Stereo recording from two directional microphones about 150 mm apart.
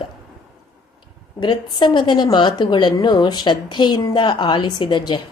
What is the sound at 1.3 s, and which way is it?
A woman's voice, 30° left (ahead or behind).